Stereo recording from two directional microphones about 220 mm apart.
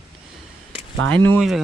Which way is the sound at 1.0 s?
10° left (ahead or behind).